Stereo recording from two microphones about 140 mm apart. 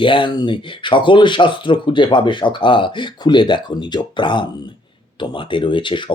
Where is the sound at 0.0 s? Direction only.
35° left (ahead or behind).